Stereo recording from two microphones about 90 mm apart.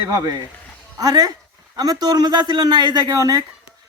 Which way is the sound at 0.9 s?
45° right (ahead or behind).